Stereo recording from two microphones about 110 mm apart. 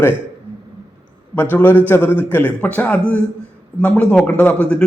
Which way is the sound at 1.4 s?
15° left (ahead or behind).